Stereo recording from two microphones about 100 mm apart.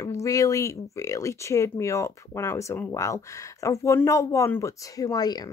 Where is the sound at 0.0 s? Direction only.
30° left (ahead or behind).